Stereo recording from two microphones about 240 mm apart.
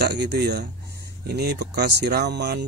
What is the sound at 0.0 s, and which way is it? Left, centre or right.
Speech, right.